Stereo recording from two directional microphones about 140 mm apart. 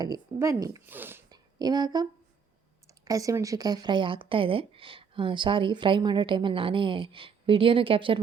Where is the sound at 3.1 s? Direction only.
25° right (ahead or behind).